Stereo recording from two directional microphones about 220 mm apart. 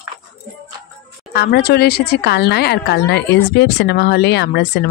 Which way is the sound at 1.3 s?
45° left (ahead or behind).